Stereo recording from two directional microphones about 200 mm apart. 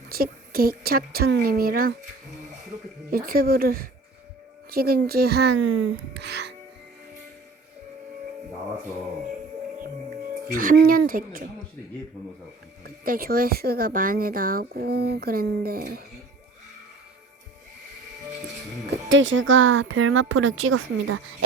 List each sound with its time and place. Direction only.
0.1 s speech: 50° right (ahead or behind)
3.1 s speech: 45° right (ahead or behind)
10.5 s speech: 45° right (ahead or behind)
12.8 s speech: 50° right (ahead or behind)
18.9 s speech: 70° right (ahead or behind); by 21.2 s 90° right